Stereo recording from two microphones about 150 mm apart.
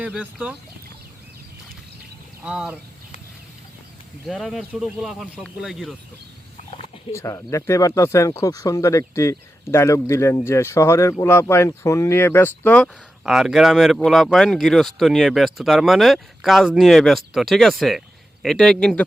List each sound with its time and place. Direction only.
0.0 s speech: 10° right (ahead or behind)
2.4 s speech: 5° right (ahead or behind)
4.3 s speech: centre (ahead or behind)
6.7 s turkey: 40° left (ahead or behind)
7.1 s speech: 20° left (ahead or behind)
13.2 s speech: 5° right (ahead or behind)